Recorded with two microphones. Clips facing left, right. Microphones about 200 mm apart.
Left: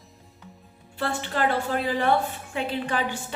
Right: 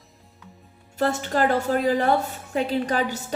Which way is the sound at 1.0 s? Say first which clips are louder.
Right 4 dB; 40° right (ahead or behind).